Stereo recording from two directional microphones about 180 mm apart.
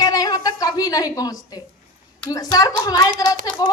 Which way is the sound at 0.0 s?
20° left (ahead or behind).